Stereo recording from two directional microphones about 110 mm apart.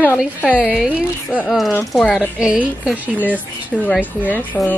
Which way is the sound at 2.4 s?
5° right (ahead or behind).